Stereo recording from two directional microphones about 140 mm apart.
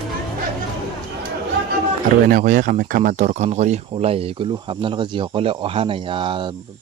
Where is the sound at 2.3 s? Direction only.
70° right (ahead or behind).